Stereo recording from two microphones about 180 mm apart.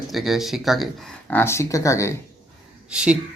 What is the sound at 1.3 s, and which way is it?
Speech, 15° left (ahead or behind).